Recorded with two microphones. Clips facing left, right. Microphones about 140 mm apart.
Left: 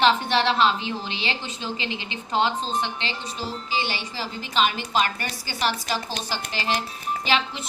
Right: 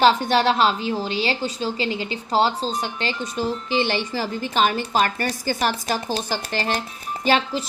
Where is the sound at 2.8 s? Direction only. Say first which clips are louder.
Right 2 dB; 45° right (ahead or behind).